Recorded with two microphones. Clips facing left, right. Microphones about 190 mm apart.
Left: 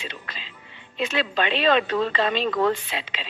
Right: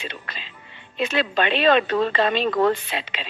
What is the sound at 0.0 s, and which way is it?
Music, 60° right (ahead or behind).